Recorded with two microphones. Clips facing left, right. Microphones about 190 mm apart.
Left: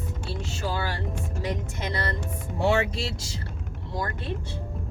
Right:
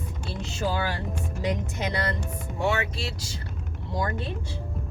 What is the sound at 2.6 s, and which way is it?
Speech, 30° left (ahead or behind).